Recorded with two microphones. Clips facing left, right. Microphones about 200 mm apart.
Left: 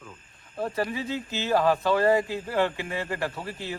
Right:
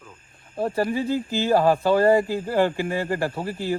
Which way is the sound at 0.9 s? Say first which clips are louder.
Right 7 dB; 50° right (ahead or behind).